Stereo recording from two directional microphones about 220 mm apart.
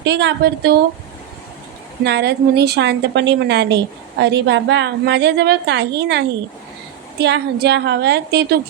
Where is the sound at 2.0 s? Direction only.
50° right (ahead or behind).